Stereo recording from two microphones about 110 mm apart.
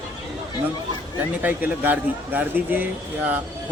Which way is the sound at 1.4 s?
15° right (ahead or behind).